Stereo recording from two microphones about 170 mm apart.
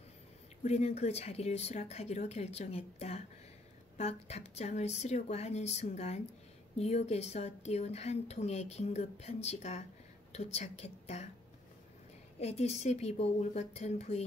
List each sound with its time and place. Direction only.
0.7 s a woman's voice: 40° left (ahead or behind)
12.4 s a woman's voice: 40° left (ahead or behind)